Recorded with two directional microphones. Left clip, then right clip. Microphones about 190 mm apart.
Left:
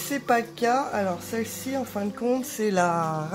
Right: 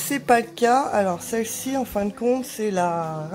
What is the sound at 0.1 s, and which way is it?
A woman's voice, 25° right (ahead or behind).